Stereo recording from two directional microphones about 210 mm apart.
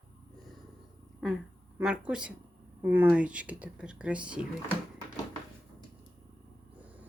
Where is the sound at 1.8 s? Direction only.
5° right (ahead or behind).